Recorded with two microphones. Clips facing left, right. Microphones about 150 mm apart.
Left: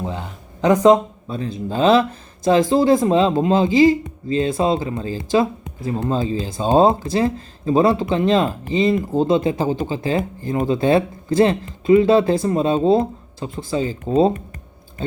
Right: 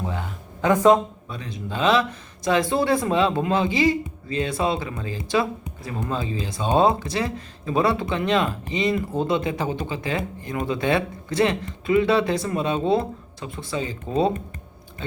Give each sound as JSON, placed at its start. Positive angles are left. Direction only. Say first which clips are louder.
{"t": 0.0, "sound": "a sound", "louder": "left 2 dB", "side_deg": 25}
{"t": 1.3, "sound": "speech", "louder": "left 12 dB", "side_deg": 35}
{"t": 4.3, "sound": "speech", "louder": "left 6 dB", "side_deg": 30}